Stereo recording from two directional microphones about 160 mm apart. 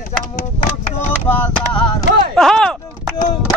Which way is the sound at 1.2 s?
10° left (ahead or behind).